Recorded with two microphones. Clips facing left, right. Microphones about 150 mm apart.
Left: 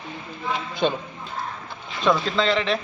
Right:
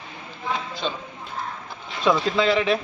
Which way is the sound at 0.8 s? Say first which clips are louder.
Left 8 dB; 55° left (ahead or behind).